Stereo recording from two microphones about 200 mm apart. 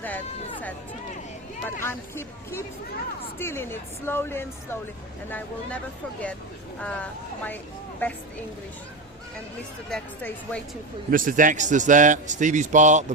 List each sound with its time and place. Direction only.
1.6 s a woman's voice: 10° left (ahead or behind)
6.7 s a woman's voice: 5° left (ahead or behind)
9.9 s a woman's voice: 5° left (ahead or behind)
11.1 s a man's voice: 45° right (ahead or behind)